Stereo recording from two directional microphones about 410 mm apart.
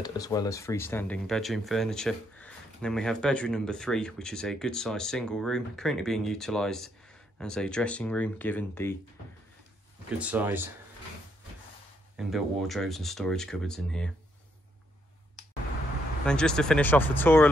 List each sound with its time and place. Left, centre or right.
0.0 s speech: centre
10.1 s speech: centre
12.2 s speech: centre
16.3 s speech: centre